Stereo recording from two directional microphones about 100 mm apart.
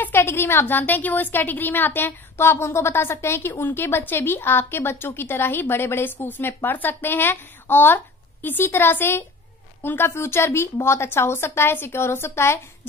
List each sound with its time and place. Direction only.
0.0 s a woman's voice: 25° left (ahead or behind)